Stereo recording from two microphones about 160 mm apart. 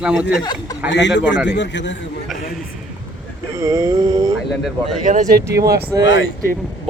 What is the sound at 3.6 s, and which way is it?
Speech, 20° right (ahead or behind).